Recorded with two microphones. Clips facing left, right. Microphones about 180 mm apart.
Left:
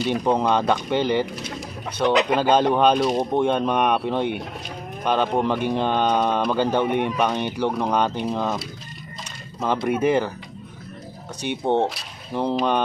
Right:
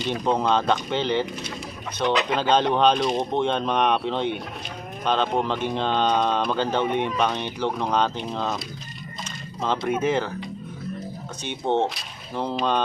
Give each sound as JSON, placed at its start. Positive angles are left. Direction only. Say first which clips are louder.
{"t": 0.0, "sound": "speech", "louder": "left 3 dB", "side_deg": 15}
{"t": 2.3, "sound": "speech", "louder": "left 3 dB", "side_deg": 10}
{"t": 11.6, "sound": "speech", "louder": "left 1 dB", "side_deg": 15}